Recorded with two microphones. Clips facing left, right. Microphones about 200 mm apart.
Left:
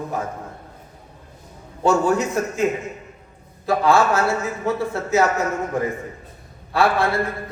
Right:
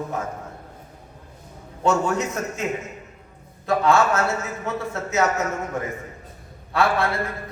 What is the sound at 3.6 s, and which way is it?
A man's voice, 30° left (ahead or behind).